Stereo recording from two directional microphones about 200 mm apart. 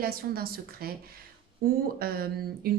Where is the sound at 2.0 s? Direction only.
50° right (ahead or behind).